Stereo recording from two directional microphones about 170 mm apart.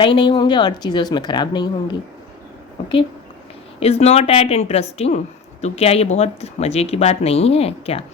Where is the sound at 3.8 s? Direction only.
40° left (ahead or behind).